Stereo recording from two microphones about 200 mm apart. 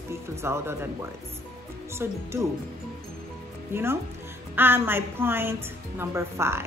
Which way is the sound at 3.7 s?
10° right (ahead or behind).